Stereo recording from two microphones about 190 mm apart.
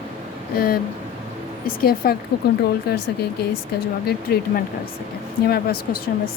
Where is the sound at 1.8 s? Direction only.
50° left (ahead or behind).